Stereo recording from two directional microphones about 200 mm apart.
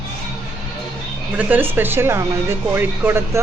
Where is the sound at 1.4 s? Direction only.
10° right (ahead or behind).